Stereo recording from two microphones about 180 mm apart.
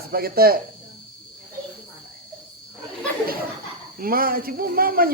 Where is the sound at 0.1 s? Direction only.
55° right (ahead or behind).